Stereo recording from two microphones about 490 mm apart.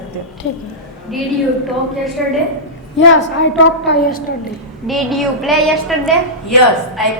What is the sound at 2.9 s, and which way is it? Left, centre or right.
A woman's voice, left.